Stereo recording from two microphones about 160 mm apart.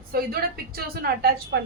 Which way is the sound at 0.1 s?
70° right (ahead or behind).